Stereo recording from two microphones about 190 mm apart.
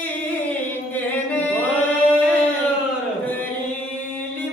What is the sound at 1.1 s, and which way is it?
Chant, 10° left (ahead or behind).